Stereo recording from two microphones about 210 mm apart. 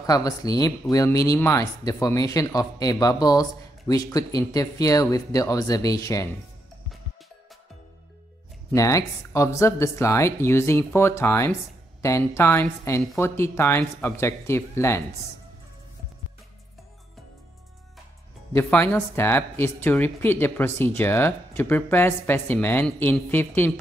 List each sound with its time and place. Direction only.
0.0 s speech: 15° left (ahead or behind)
8.7 s speech: 15° left (ahead or behind)
18.5 s speech: 10° left (ahead or behind)